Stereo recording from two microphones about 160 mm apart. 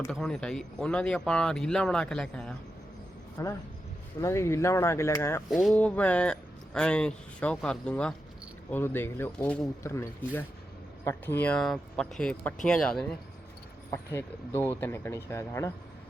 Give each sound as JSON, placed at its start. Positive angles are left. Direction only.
{"t": 0.1, "sound": "speech", "side_deg": 5}
{"t": 3.4, "sound": "speech", "side_deg": 20}
{"t": 5.5, "sound": "speech", "side_deg": 0}
{"t": 5.8, "sound": "speech", "side_deg": 10}
{"t": 13.9, "sound": "speech", "side_deg": 15}